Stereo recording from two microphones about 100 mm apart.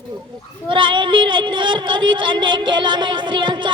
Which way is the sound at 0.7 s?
55° right (ahead or behind).